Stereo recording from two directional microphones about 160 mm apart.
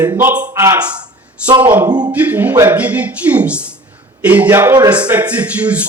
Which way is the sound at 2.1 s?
10° right (ahead or behind).